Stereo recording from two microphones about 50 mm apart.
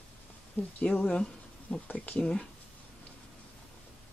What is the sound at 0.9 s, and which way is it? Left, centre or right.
Speech, left.